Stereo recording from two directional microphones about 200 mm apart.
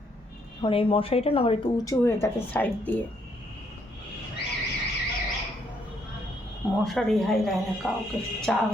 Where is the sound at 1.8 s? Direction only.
15° left (ahead or behind).